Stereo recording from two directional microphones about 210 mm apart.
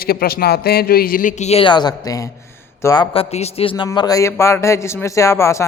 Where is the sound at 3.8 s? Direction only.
20° left (ahead or behind).